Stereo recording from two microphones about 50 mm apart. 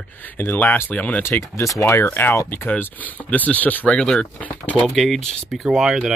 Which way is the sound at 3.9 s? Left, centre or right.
Centre.